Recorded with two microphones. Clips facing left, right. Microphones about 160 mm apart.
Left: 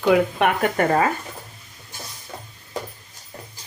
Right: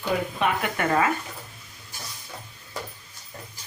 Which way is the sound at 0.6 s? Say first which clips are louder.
Left 5 dB; 40° left (ahead or behind).